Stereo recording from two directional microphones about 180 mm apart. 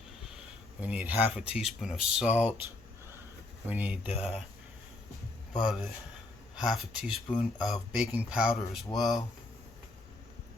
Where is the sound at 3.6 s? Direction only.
10° right (ahead or behind).